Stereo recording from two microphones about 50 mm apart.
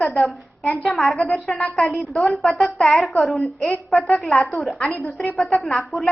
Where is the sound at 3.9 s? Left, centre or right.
Centre.